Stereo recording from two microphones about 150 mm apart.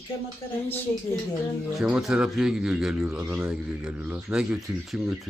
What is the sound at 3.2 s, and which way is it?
A man's voice, 15° right (ahead or behind).